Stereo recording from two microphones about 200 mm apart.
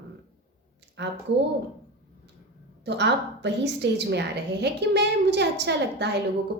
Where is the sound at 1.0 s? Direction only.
65° right (ahead or behind).